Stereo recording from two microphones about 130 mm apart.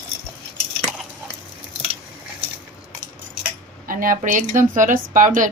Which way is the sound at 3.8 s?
90° right.